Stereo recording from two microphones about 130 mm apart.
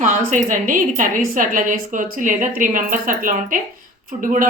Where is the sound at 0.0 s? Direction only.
90° right.